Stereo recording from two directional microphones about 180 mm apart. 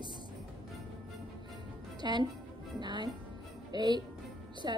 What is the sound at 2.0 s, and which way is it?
Speech, 25° right (ahead or behind).